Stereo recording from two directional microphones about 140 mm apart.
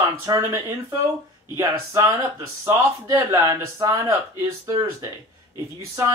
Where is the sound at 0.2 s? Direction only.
20° right (ahead or behind).